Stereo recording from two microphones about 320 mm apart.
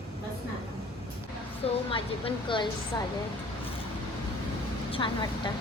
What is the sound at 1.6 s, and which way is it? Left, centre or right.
Speech, centre.